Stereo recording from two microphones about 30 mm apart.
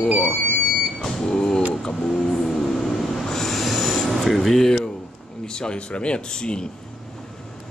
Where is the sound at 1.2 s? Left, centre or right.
Left.